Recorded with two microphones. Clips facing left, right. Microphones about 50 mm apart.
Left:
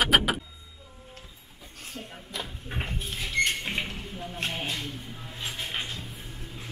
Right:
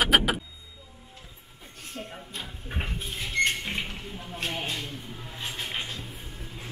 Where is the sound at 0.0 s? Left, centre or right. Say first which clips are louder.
Even; centre.